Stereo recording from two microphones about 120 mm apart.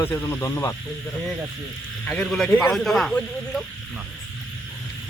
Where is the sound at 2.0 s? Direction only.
10° left (ahead or behind).